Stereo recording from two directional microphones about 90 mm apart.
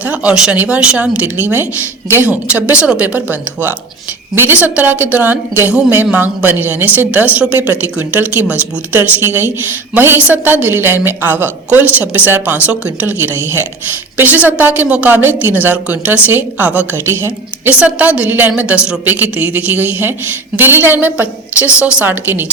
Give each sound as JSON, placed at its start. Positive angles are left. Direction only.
{"t": 0.0, "sound": "a woman's voice", "side_deg": -15}
{"t": 17.7, "sound": "a woman's voice", "side_deg": -15}
{"t": 22.0, "sound": "a woman's voice", "side_deg": -25}